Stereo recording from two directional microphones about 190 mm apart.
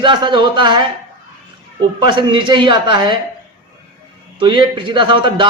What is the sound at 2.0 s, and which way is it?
Speech, 25° right (ahead or behind).